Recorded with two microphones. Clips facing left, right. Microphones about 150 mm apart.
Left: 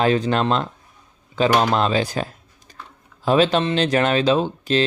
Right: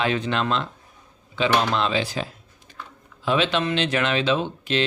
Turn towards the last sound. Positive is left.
turn(degrees=35)  # may be behind; listen again after turning